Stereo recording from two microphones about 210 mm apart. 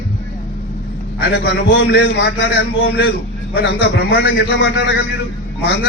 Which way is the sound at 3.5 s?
55° left (ahead or behind).